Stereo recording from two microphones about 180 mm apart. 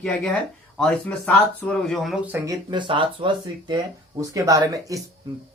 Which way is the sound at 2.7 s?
25° right (ahead or behind).